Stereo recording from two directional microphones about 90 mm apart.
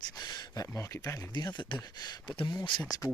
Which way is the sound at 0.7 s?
35° left (ahead or behind).